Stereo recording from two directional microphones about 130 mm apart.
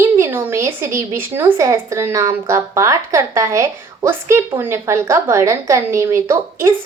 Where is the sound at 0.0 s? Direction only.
15° right (ahead or behind).